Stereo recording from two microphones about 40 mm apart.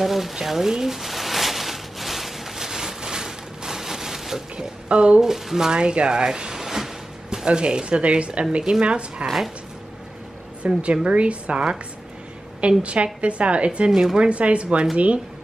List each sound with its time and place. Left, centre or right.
0.0 s a sound: centre
4.8 s speech: right
5.2 s speech: centre
5.7 s a sound: right
7.4 s speech: right
10.6 s a woman's voice: right